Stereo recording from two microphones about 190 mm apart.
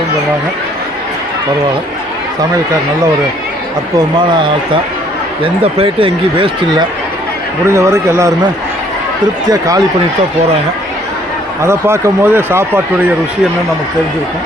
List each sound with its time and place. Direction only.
3.9 s speech: 25° right (ahead or behind)
7.7 s speech: 15° right (ahead or behind)
9.5 s speech: 20° right (ahead or behind)
11.6 s speech: 15° right (ahead or behind)